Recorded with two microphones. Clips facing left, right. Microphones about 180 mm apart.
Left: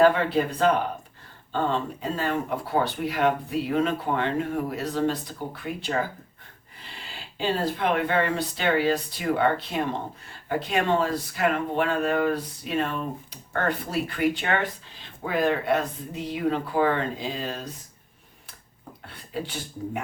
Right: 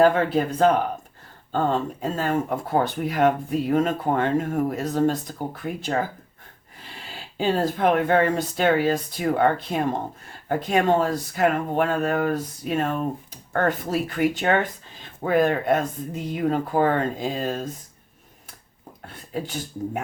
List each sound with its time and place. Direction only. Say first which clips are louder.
0.0 s speech: right 1 dB; 45° right (ahead or behind)
7.1 s speech: right 4 dB; 45° right (ahead or behind)
19.0 s speech: right 2 dB; 45° right (ahead or behind)